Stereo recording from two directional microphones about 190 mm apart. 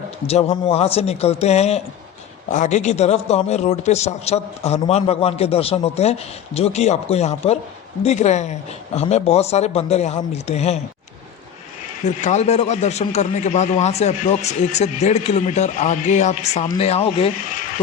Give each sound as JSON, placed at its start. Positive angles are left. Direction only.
{"t": 0.3, "sound": "a man's voice", "side_deg": 30}
{"t": 12.0, "sound": "a man's voice", "side_deg": 40}